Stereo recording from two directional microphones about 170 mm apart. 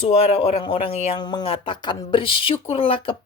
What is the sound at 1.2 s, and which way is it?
Speech, 25° left (ahead or behind).